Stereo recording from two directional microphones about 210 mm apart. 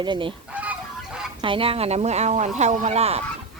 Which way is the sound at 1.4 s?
25° right (ahead or behind).